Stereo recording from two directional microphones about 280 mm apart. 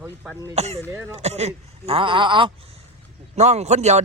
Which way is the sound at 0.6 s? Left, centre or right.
Right.